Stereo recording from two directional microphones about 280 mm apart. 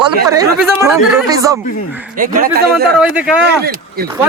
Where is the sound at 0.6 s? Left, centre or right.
Centre.